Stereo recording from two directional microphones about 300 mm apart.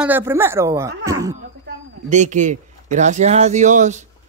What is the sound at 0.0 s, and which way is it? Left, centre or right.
Speech, centre.